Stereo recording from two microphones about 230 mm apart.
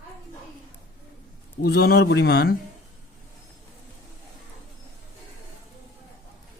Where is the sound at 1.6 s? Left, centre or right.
Left.